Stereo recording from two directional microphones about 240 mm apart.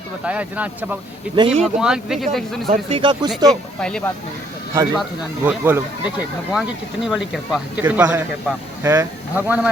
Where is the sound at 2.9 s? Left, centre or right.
Centre.